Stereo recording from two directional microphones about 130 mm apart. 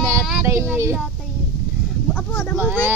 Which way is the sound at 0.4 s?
15° right (ahead or behind).